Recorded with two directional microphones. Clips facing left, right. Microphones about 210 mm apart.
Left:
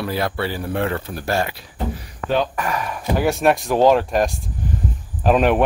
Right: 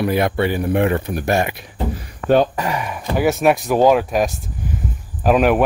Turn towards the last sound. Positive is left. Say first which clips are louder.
# right 1 dB
turn(degrees=-5)  # may be behind; listen again after turning